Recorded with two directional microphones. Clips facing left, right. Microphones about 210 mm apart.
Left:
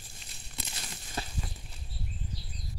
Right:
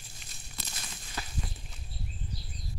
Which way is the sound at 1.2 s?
30° left (ahead or behind).